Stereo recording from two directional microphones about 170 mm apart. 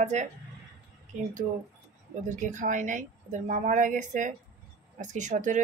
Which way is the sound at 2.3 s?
45° right (ahead or behind).